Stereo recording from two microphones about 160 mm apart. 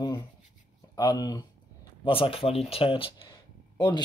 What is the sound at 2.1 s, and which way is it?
Speech, 35° left (ahead or behind).